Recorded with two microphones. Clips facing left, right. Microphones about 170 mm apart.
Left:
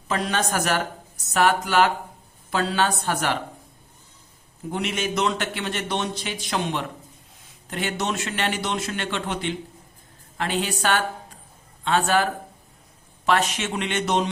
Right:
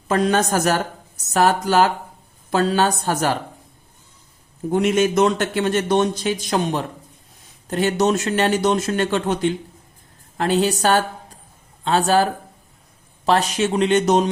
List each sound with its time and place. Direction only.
0.1 s a man's voice: 45° right (ahead or behind)
4.7 s a man's voice: 45° right (ahead or behind)